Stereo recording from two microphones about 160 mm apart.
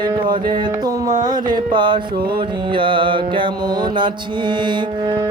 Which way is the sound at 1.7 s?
30° right (ahead or behind).